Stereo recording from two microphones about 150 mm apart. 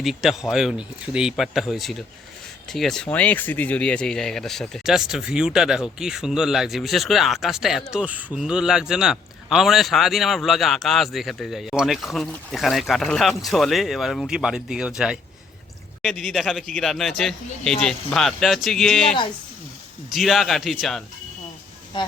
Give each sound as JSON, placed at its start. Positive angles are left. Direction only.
{"t": 0.0, "sound": "a man's voice", "side_deg": 0}